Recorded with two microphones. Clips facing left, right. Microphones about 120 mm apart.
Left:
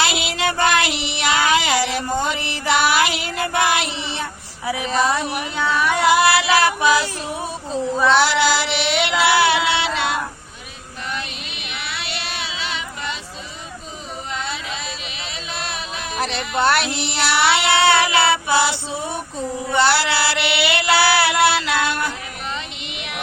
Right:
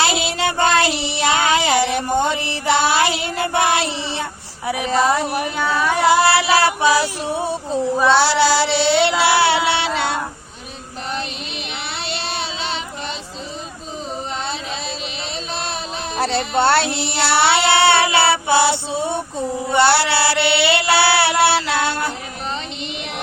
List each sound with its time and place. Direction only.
0.0 s child singing: 30° right (ahead or behind)
8.0 s female singing: 30° right (ahead or behind)
11.9 s child singing: 35° right (ahead or behind)
15.5 s music: 35° right (ahead or behind)
19.6 s child singing: 25° right (ahead or behind)